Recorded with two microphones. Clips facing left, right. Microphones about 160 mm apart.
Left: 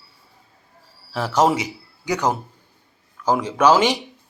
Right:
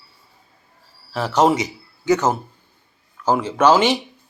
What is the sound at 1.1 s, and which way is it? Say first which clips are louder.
A man's voice: right 2 dB; 10° left (ahead or behind).